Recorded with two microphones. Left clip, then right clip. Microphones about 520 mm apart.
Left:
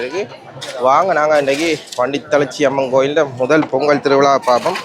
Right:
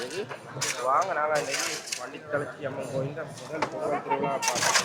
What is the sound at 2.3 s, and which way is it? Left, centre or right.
Speech, left.